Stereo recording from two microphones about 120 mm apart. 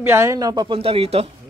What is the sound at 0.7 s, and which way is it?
Speech, 55° right (ahead or behind).